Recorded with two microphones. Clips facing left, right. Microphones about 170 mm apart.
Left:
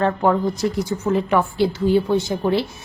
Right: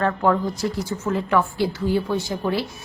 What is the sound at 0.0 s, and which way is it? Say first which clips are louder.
A woman's voice: left 2 dB; 20° left (ahead or behind).